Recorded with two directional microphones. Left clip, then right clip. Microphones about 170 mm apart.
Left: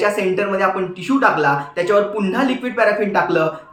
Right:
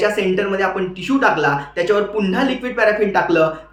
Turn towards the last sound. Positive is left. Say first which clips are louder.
# right 2 dB
turn(degrees=-10)  # may be behind; listen again after turning